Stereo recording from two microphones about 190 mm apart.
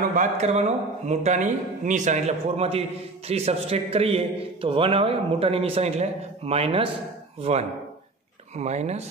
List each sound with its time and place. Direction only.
0.1 s a man's voice: 40° right (ahead or behind)
8.5 s a man's voice: 35° right (ahead or behind)